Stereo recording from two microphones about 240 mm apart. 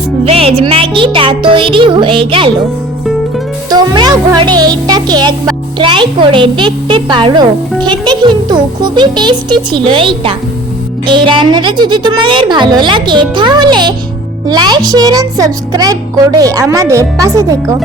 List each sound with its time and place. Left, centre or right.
0.3 s a woman's voice: right
3.7 s a woman's voice: centre